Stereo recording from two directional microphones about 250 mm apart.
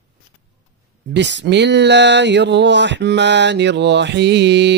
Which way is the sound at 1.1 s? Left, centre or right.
Right.